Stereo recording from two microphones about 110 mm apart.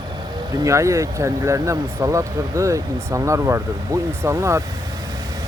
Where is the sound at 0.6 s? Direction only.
25° right (ahead or behind).